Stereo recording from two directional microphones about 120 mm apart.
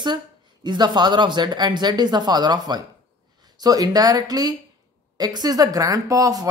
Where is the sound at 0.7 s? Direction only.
35° right (ahead or behind).